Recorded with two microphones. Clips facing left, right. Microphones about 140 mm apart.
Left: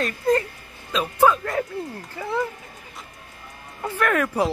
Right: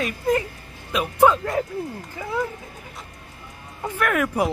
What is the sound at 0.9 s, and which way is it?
Speech, 15° right (ahead or behind).